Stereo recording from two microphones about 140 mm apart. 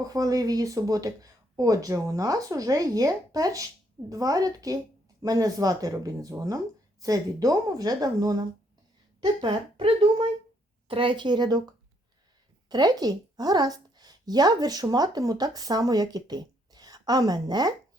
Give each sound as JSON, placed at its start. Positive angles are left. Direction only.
{"t": 0.0, "sound": "speech", "side_deg": -25}
{"t": 12.6, "sound": "a woman's voice", "side_deg": -30}